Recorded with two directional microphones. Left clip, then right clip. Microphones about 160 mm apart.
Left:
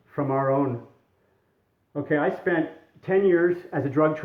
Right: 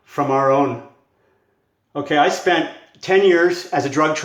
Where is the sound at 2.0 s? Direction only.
40° right (ahead or behind).